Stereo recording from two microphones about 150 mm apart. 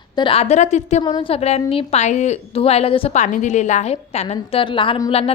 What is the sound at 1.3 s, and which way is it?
A woman's voice, 45° left (ahead or behind).